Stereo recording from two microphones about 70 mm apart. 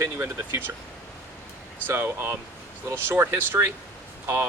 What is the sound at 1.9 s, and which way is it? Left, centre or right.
Speech, right.